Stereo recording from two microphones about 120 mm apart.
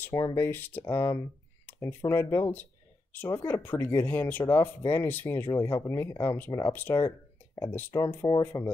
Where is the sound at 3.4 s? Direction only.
15° left (ahead or behind).